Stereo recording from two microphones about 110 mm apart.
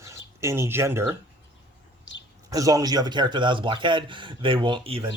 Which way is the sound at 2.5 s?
35° right (ahead or behind).